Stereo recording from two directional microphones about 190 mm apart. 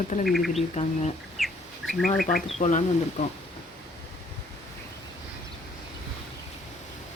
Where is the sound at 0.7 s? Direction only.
35° left (ahead or behind).